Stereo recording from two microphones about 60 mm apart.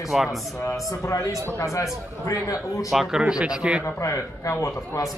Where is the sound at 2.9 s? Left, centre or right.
Centre.